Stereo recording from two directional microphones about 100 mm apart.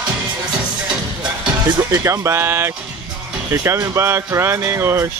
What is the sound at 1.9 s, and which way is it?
Speech, 30° right (ahead or behind).